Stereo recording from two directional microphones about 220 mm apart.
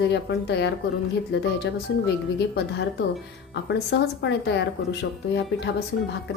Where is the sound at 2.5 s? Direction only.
50° left (ahead or behind).